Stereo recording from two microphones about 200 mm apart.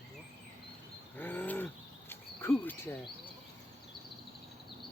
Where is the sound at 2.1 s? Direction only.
10° left (ahead or behind).